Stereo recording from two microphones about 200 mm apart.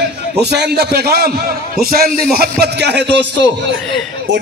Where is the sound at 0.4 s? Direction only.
55° right (ahead or behind).